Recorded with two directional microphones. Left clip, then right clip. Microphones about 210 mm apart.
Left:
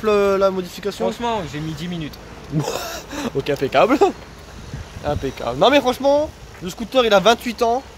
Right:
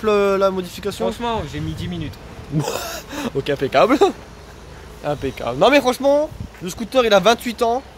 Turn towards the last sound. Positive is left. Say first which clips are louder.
# even
turn(degrees=-10)  # may be behind; listen again after turning